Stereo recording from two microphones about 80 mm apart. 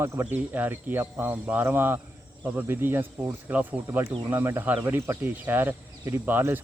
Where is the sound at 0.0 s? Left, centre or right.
Right.